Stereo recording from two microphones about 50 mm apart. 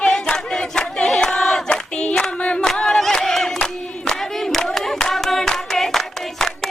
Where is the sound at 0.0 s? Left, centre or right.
Centre.